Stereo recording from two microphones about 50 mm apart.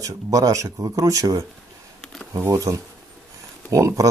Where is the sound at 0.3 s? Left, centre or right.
Right.